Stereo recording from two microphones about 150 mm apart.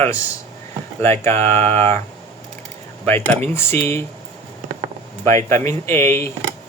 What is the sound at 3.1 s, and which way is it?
Speech, 15° left (ahead or behind).